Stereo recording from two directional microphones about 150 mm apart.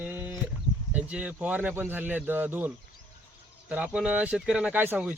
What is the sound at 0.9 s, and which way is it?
Speech, 10° right (ahead or behind).